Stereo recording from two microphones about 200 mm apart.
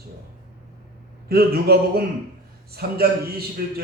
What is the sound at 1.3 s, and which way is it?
A man's voice, 50° right (ahead or behind).